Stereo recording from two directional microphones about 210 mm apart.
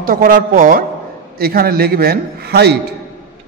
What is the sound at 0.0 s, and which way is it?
A woman's voice, 40° right (ahead or behind).